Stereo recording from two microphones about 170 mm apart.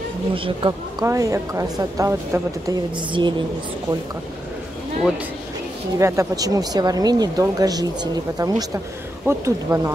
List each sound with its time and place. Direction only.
0.3 s speech: 30° right (ahead or behind)
5.9 s speech: 20° right (ahead or behind)